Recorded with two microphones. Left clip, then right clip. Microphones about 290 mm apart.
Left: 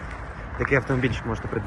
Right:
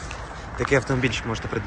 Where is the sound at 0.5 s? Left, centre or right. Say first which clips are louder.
Right 1 dB; centre.